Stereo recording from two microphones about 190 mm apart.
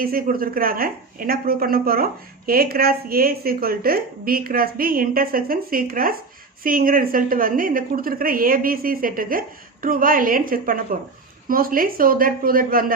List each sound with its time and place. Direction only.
0.0 s a woman's voice: 50° right (ahead or behind)